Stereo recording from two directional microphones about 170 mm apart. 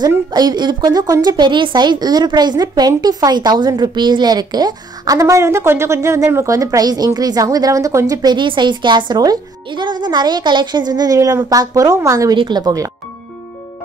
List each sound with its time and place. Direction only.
0.0 s a woman's voice: 25° right (ahead or behind)